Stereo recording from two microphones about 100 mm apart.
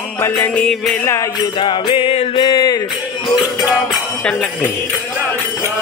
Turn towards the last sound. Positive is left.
turn(degrees=10)  # may be behind; listen again after turning